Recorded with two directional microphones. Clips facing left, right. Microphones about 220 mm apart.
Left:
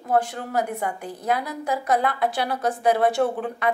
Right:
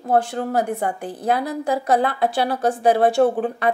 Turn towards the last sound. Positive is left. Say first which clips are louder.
# right 6 dB
turn(degrees=-30)  # may be behind; listen again after turning